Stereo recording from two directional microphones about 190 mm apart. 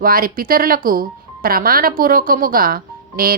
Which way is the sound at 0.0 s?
50° right (ahead or behind).